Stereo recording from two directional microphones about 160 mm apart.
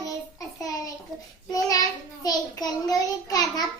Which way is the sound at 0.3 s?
20° left (ahead or behind).